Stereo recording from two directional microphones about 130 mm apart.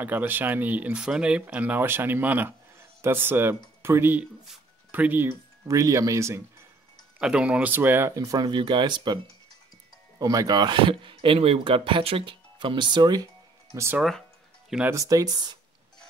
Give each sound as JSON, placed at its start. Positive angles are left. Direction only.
{"t": 0.0, "sound": "speech", "side_deg": -15}
{"t": 5.7, "sound": "speech", "side_deg": -25}
{"t": 7.2, "sound": "speech", "side_deg": -5}